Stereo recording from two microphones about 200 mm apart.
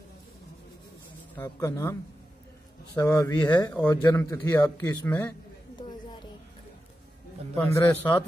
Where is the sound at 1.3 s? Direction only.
10° left (ahead or behind).